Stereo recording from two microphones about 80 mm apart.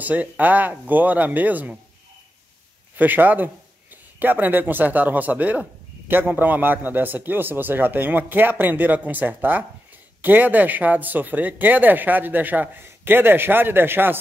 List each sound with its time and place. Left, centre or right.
0.0 s speech: right
3.0 s speech: right